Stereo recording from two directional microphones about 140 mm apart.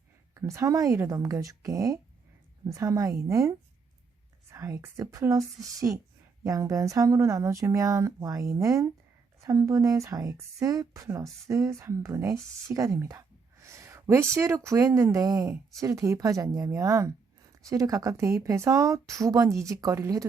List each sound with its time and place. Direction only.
0.3 s speech: 20° right (ahead or behind)
4.5 s speech: 20° right (ahead or behind)